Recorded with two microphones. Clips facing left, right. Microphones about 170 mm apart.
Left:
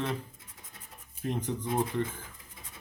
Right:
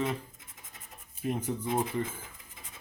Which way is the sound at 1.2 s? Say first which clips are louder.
Right 1 dB; 5° right (ahead or behind).